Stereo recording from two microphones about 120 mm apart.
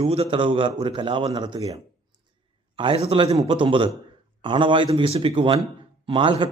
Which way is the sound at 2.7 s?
50° right (ahead or behind).